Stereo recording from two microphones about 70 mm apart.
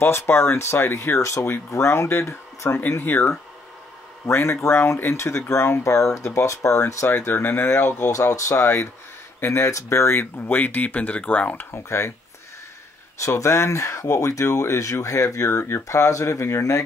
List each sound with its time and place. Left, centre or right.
0.0 s speech: left
7.1 s speech: left
11.7 s speech: left
13.2 s speech: left